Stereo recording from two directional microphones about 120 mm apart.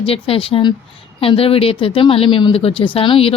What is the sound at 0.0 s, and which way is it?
Speech, 50° left (ahead or behind).